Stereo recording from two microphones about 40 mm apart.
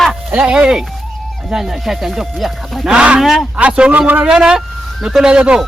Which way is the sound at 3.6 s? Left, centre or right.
Right.